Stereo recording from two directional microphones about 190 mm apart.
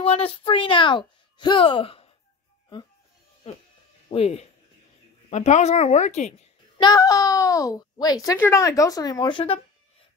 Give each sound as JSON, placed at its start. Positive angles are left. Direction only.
{"t": 0.0, "sound": "speech", "side_deg": 30}
{"t": 4.1, "sound": "speech", "side_deg": 30}
{"t": 6.8, "sound": "a child's voice", "side_deg": 20}